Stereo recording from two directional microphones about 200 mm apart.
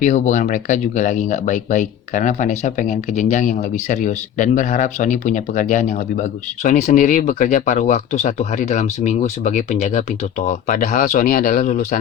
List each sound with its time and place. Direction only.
0.0 s speech: 40° left (ahead or behind)